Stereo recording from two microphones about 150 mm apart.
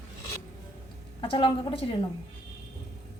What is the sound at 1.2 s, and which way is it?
Speech, 35° left (ahead or behind).